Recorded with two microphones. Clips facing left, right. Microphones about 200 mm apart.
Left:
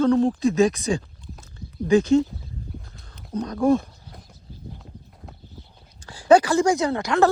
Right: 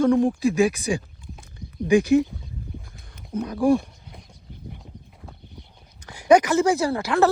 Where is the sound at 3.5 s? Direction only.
15° right (ahead or behind).